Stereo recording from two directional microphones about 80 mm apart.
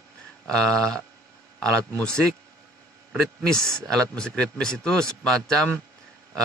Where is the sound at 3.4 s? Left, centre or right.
Centre.